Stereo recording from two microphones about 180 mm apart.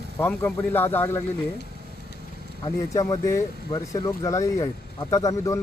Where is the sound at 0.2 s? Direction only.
10° left (ahead or behind).